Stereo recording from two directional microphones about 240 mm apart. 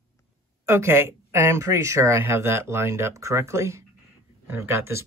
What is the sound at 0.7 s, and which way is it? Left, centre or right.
Speech, centre.